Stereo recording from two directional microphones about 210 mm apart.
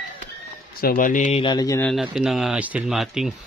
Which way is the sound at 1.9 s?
Centre (ahead or behind).